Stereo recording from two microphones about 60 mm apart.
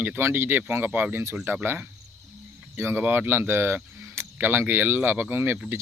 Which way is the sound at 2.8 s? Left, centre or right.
Right.